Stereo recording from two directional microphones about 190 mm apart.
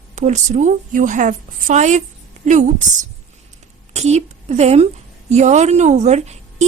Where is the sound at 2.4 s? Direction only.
40° right (ahead or behind).